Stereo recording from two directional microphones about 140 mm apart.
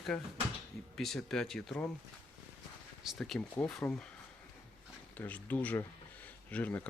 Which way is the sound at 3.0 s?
Centre (ahead or behind).